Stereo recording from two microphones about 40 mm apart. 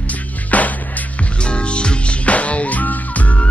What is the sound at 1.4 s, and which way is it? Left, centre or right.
Music, left.